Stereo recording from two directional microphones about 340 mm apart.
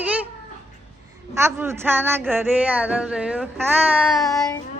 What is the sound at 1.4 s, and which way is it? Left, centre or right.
Speech, centre.